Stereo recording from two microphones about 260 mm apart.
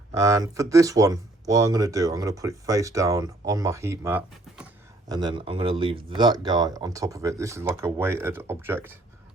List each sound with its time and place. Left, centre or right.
0.2 s speech: centre
5.1 s speech: centre